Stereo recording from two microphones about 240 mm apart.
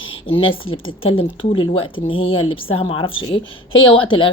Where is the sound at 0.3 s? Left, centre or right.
Left.